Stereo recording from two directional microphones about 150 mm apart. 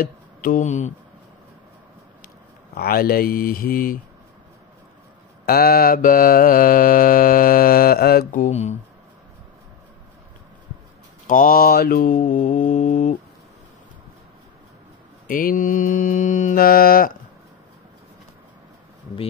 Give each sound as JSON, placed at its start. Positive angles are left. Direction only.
{"t": 0.0, "sound": "a sound", "side_deg": 65}
{"t": 2.7, "sound": "mantra", "side_deg": 90}
{"t": 5.4, "sound": "mantra", "side_deg": 90}
{"t": 11.2, "sound": "mantra", "side_deg": 70}
{"t": 15.2, "sound": "mantra", "side_deg": 65}